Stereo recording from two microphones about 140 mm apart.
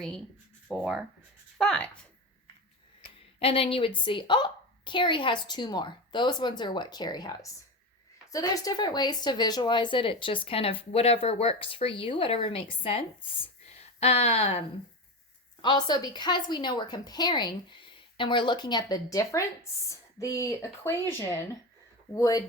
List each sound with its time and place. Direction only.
0.7 s speech: centre (ahead or behind)
3.4 s speech: 40° left (ahead or behind)
15.6 s speech: 30° left (ahead or behind)